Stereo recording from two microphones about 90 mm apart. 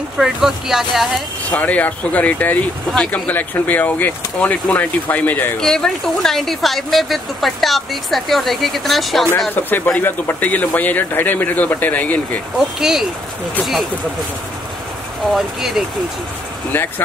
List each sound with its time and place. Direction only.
0.2 s speech: 5° right (ahead or behind)
1.5 s speech: 15° left (ahead or behind)
5.6 s speech: 5° left (ahead or behind)
9.6 s speech: 20° left (ahead or behind)
12.5 s speech: 5° right (ahead or behind)
15.3 s speech: 5° right (ahead or behind)
16.7 s speech: 25° left (ahead or behind)